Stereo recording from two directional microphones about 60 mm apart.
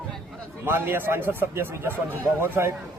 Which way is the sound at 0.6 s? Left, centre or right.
Right.